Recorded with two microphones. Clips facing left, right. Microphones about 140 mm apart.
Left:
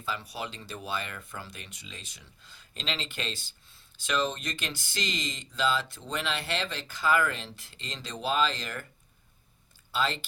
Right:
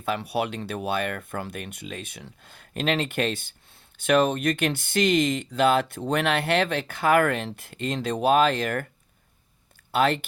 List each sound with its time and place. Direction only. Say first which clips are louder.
0.0 s speech: right 9 dB; 65° right (ahead or behind)
9.9 s speech: right 8 dB; 60° right (ahead or behind)